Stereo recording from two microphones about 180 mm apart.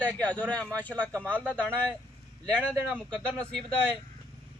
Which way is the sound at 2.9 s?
5° left (ahead or behind).